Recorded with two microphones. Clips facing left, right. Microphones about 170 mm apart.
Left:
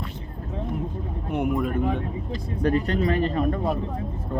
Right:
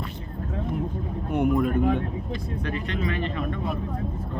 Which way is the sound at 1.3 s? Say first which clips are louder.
Right 2 dB; 5° left (ahead or behind).